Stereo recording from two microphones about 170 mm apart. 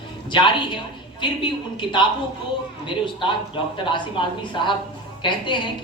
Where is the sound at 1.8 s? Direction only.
30° left (ahead or behind).